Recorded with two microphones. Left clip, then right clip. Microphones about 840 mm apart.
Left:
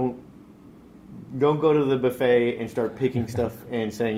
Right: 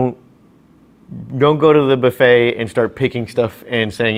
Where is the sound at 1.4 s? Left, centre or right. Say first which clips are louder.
Right 9 dB; right.